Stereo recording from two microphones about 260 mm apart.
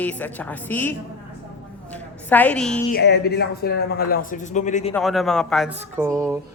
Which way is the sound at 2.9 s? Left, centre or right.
Left.